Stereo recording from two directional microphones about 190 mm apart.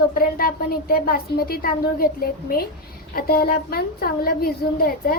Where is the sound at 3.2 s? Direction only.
55° left (ahead or behind).